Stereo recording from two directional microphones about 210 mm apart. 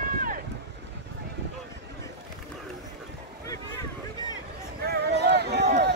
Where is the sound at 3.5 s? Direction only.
15° left (ahead or behind).